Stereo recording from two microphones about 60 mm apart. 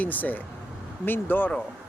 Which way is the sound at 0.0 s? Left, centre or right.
Left.